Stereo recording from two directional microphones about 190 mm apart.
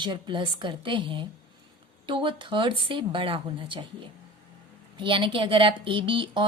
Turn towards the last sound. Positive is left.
turn(degrees=-25)  # may be behind; listen again after turning